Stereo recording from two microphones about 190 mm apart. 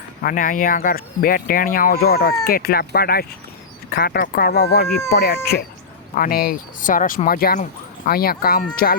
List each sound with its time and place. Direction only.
0.2 s speech: 45° left (ahead or behind)